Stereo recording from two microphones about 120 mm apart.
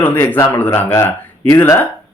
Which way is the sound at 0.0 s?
15° left (ahead or behind).